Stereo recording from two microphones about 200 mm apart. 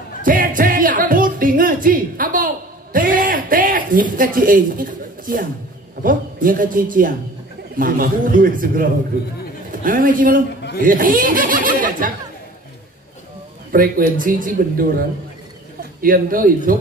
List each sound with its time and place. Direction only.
0.2 s music: 45° right (ahead or behind)
6.0 s a man's voice: 45° right (ahead or behind)
13.7 s a man's voice: 45° right (ahead or behind)